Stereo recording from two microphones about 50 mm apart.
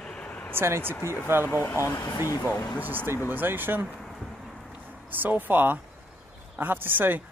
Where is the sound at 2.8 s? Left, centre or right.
Right.